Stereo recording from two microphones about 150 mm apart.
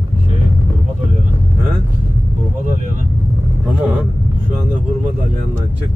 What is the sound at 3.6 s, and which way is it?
Vehicle, 10° right (ahead or behind).